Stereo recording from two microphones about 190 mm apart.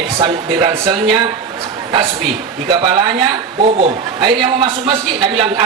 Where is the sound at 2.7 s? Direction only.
25° right (ahead or behind).